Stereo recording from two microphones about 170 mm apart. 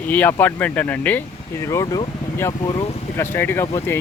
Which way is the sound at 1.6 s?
20° left (ahead or behind).